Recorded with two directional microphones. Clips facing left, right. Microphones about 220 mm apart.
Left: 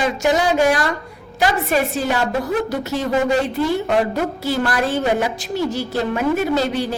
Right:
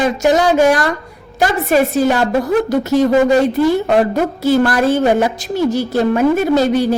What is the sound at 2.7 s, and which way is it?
Speech, 45° right (ahead or behind).